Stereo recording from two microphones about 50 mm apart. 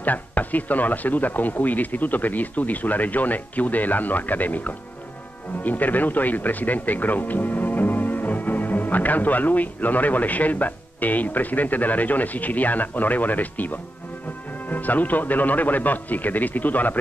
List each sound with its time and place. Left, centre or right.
0.0 s speech: left